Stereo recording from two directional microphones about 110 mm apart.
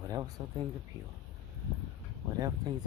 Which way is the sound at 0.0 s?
35° right (ahead or behind).